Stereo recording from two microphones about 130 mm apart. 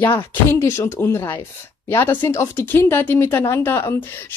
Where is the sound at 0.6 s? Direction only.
20° left (ahead or behind).